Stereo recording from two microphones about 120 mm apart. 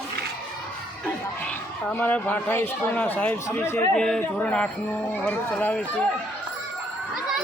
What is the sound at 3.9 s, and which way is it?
Speech, 5° left (ahead or behind).